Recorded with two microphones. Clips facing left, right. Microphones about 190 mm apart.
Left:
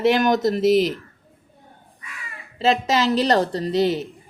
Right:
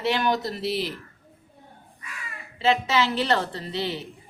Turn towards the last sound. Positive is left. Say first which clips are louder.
# left 10 dB
turn(degrees=40)  # may be behind; listen again after turning